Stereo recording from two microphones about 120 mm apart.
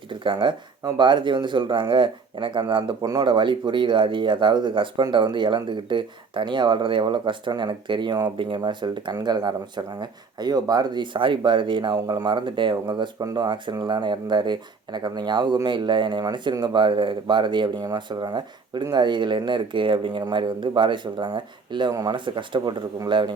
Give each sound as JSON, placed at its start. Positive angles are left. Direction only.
{"t": 0.1, "sound": "speech", "side_deg": -40}